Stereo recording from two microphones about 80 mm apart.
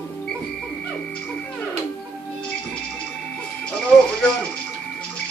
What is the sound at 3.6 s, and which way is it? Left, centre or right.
Music, centre.